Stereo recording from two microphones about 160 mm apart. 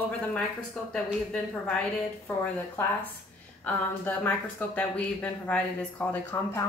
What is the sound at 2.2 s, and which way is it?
Speech, 15° left (ahead or behind).